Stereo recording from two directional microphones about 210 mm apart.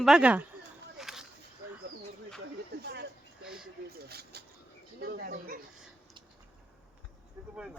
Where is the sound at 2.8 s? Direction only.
50° right (ahead or behind).